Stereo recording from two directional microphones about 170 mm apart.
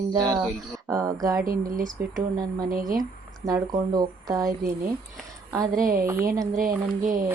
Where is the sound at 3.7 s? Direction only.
25° right (ahead or behind).